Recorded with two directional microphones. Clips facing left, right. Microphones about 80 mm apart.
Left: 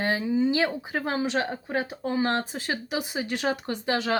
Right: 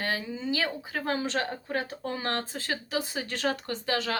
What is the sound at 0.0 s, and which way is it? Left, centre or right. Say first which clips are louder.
Speech: left 8 dB; left.